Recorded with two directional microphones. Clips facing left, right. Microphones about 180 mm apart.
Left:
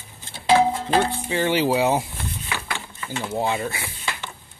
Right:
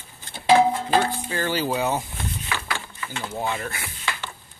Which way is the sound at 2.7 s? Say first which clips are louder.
Left 1 dB; 30° left (ahead or behind).